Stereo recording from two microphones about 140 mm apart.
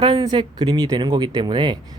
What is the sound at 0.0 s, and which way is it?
Speech, 35° right (ahead or behind).